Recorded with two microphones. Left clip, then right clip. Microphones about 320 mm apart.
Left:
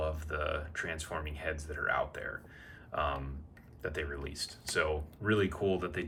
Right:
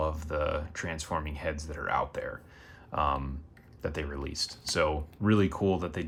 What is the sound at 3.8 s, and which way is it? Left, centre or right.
Speech, centre.